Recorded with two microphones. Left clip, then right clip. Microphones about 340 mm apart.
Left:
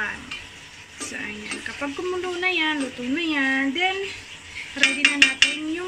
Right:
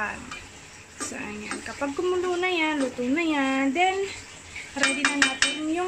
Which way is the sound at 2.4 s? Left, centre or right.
Centre.